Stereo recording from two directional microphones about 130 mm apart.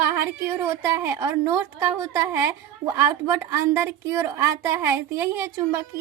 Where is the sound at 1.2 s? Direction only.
30° right (ahead or behind).